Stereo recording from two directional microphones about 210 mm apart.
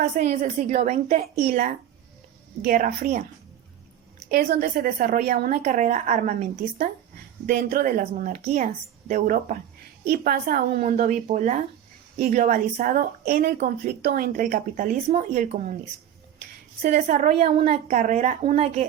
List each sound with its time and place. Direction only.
0.0 s a woman's voice: 50° right (ahead or behind)
0.9 s a woman's voice: 30° right (ahead or behind)
1.4 s a woman's voice: 50° right (ahead or behind)
4.3 s a woman's voice: 50° right (ahead or behind)
5.6 s a woman's voice: 35° right (ahead or behind)
10.0 s a woman's voice: 50° right (ahead or behind)
16.8 s a woman's voice: 40° right (ahead or behind)